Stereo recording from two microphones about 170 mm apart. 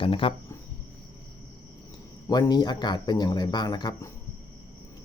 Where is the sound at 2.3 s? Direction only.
25° left (ahead or behind).